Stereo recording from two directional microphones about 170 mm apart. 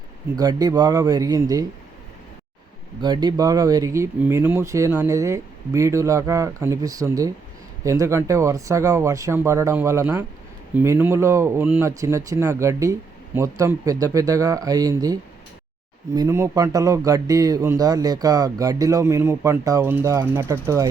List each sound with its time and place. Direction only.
0.3 s a man's voice: 25° right (ahead or behind)
3.0 s a man's voice: 25° right (ahead or behind)